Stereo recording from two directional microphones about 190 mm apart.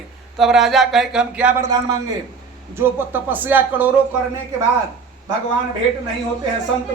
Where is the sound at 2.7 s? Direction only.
10° right (ahead or behind).